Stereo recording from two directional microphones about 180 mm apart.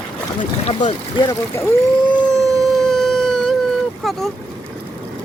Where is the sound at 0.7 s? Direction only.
40° left (ahead or behind).